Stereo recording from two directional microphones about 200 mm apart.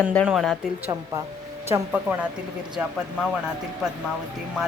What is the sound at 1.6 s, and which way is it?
Speech, 10° right (ahead or behind).